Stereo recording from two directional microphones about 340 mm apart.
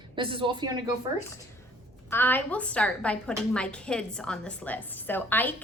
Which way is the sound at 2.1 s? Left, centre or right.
Centre.